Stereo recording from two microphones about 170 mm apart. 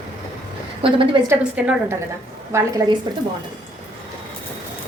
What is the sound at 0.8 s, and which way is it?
Speech, 30° right (ahead or behind).